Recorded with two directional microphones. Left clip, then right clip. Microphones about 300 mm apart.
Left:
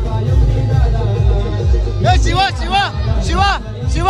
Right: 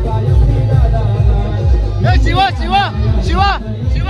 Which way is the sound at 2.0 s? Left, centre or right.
Centre.